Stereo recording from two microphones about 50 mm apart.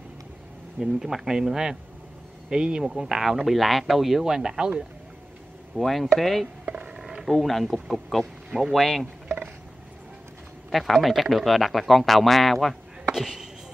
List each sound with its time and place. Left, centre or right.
0.7 s speech: centre
5.8 s speech: centre
6.7 s a sound: right
7.2 s sheep: centre
7.4 s speech: centre
8.7 s speech: centre
10.7 s speech: centre
13.1 s speech: centre